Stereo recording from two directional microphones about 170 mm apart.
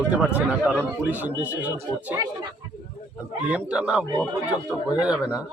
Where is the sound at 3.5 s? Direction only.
5° right (ahead or behind).